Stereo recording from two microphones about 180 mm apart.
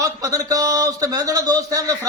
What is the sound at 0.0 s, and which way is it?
Speech, 20° right (ahead or behind).